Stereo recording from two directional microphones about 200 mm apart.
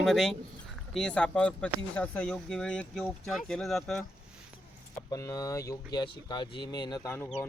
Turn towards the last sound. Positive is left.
turn(degrees=15)  # may be behind; listen again after turning